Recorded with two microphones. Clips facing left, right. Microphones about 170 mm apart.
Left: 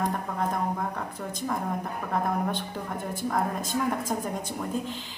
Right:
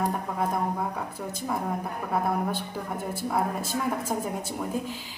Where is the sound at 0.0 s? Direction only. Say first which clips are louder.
Right 1 dB; 10° right (ahead or behind).